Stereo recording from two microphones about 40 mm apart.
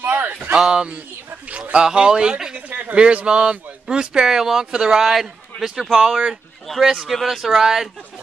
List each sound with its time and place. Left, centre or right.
0.0 s a sound: right
0.6 s speech: centre
1.9 s speech: centre
2.5 s a man's voice: right; by 5.9 s centre
5.9 s speech: right
7.1 s speech: centre